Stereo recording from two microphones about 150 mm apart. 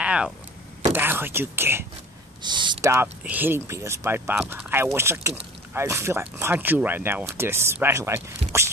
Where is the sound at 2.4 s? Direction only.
30° right (ahead or behind).